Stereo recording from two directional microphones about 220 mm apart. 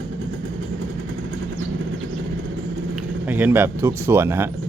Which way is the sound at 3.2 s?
10° right (ahead or behind).